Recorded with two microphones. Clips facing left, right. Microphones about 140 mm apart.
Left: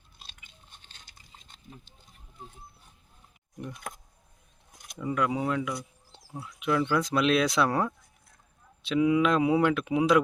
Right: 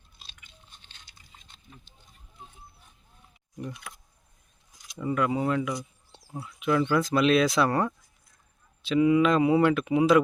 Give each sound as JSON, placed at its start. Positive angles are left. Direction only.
{"t": 0.8, "sound": "biting", "side_deg": 45}
{"t": 3.8, "sound": "speech", "side_deg": 50}
{"t": 4.7, "sound": "keys jangling", "side_deg": 60}
{"t": 4.9, "sound": "speech", "side_deg": 0}